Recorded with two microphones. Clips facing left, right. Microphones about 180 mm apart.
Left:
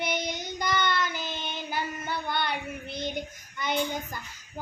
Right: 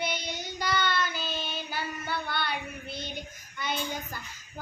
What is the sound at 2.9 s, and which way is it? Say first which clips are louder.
Speech: left 8 dB; 15° left (ahead or behind).